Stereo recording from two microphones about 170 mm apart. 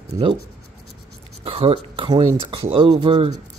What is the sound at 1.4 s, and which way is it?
Speech, 35° right (ahead or behind).